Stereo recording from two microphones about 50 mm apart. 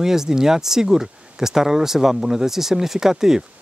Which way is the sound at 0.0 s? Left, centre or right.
Centre.